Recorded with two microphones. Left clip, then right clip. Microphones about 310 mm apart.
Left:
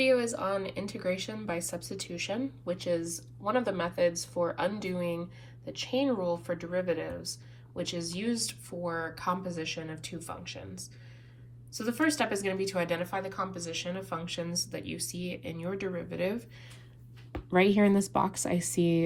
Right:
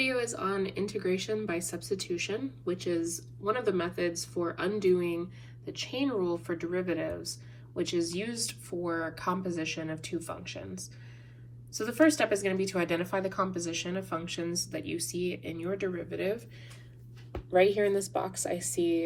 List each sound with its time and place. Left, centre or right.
0.3 s speech: centre